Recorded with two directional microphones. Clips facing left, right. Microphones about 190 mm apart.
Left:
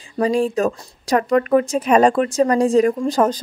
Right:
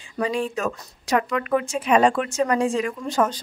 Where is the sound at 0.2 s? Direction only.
35° left (ahead or behind).